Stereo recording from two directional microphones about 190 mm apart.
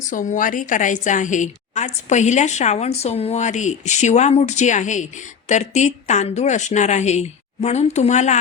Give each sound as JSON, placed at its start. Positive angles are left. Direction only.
{"t": 0.1, "sound": "a woman's voice", "side_deg": 45}